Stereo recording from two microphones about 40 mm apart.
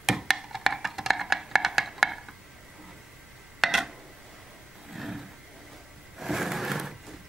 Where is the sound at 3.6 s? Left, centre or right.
Centre.